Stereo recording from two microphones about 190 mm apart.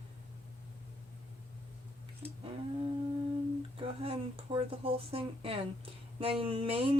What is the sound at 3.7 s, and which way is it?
Speech, 30° right (ahead or behind).